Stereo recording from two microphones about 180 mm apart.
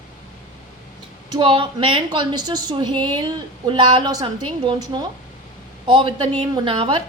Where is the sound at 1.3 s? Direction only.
30° right (ahead or behind).